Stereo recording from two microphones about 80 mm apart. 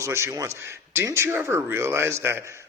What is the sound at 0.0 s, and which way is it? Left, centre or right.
Speech, right.